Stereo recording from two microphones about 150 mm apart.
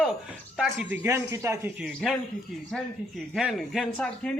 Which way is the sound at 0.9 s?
15° right (ahead or behind).